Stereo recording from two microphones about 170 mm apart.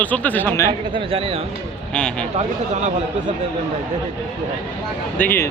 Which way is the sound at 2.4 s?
45° right (ahead or behind).